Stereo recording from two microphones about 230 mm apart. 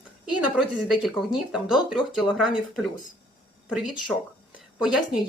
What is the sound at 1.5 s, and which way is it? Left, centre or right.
Speech, centre.